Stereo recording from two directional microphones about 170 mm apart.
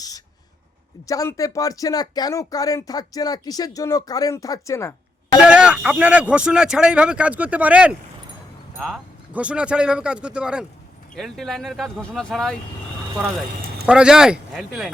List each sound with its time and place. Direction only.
1.0 s speech: 20° left (ahead or behind)
5.4 s speech: 5° right (ahead or behind)
13.8 s speech: 5° right (ahead or behind)